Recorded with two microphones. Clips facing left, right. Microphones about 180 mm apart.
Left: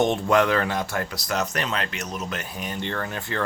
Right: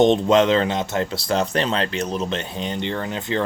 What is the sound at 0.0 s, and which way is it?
Speech, 20° right (ahead or behind).